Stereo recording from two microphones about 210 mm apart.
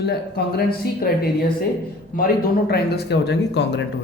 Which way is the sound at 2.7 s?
50° left (ahead or behind).